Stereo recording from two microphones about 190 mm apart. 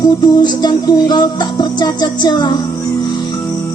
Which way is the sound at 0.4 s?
20° left (ahead or behind).